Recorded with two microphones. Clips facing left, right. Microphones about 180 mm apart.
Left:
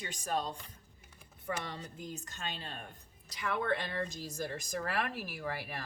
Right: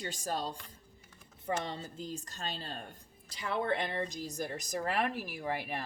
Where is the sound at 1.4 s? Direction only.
25° right (ahead or behind).